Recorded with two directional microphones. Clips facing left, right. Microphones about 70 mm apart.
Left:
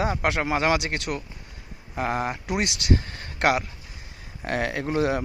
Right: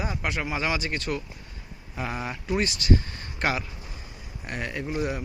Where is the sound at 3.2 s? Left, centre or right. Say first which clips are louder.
Left 5 dB; left.